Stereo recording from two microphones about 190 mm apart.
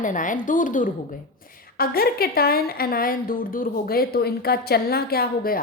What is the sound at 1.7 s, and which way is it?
A woman's voice, 55° left (ahead or behind).